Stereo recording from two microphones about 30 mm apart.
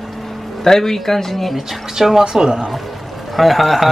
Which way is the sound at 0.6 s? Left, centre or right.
Centre.